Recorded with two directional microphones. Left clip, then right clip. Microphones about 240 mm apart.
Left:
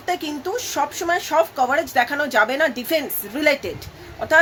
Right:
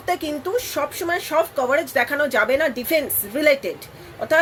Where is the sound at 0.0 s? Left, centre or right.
Centre.